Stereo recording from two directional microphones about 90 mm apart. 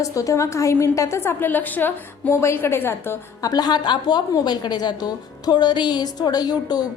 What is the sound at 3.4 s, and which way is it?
A woman's voice, 45° left (ahead or behind).